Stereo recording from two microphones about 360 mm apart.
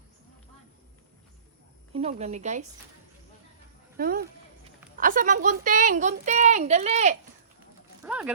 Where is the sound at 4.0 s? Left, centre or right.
Right.